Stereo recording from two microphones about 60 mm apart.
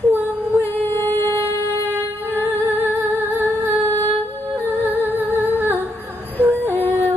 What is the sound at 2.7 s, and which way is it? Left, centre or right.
Humming, right.